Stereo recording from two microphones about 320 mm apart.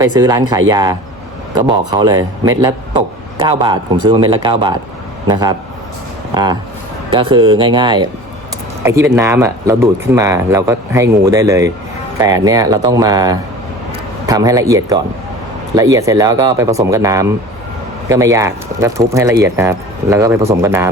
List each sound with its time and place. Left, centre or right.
0.0 s a man's voice: centre